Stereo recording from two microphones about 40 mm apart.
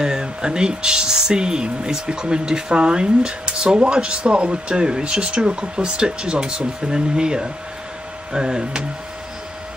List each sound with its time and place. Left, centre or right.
0.0 s speech: centre